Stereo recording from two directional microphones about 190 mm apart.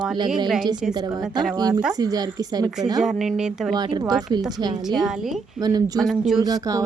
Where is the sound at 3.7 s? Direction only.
20° right (ahead or behind).